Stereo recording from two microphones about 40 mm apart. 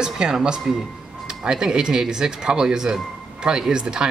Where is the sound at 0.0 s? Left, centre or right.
Centre.